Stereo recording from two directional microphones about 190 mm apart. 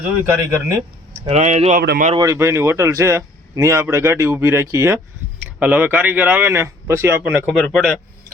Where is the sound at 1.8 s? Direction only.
55° right (ahead or behind).